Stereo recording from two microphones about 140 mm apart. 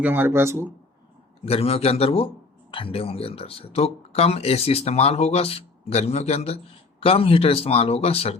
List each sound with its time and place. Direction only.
0.0 s speech: 15° right (ahead or behind)
1.5 s speech: 45° left (ahead or behind)